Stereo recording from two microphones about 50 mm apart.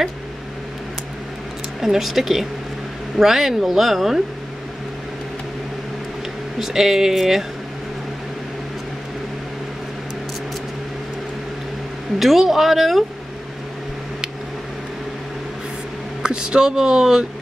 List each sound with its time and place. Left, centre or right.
1.8 s speech: centre
6.6 s speech: centre
12.2 s speech: centre
16.2 s speech: centre